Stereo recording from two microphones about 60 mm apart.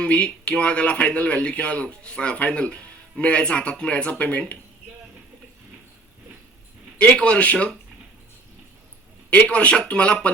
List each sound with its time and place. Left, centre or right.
0.0 s speech: centre
7.0 s speech: centre
9.3 s speech: left